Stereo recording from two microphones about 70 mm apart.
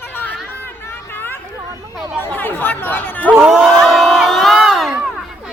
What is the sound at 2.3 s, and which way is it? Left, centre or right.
Chatter, left.